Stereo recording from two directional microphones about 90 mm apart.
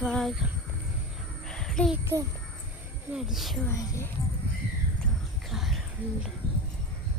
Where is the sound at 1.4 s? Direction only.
5° left (ahead or behind).